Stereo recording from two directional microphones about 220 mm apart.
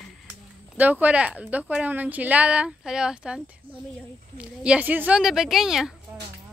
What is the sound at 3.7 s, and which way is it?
Snake, 25° right (ahead or behind).